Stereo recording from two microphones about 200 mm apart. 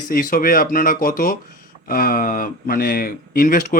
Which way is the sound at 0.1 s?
45° left (ahead or behind).